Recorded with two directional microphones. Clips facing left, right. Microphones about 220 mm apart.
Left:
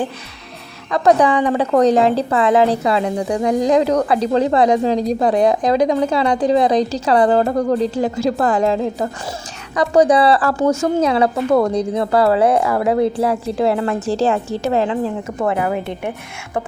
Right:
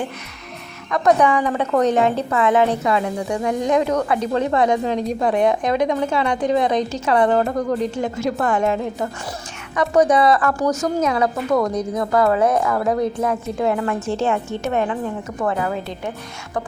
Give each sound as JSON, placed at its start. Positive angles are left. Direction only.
{"t": 0.9, "sound": "a woman's voice", "side_deg": 30}